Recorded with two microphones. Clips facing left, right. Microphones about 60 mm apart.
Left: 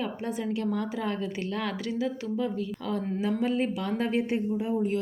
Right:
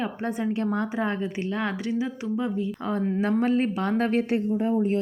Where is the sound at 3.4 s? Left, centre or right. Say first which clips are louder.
Right 4 dB; right.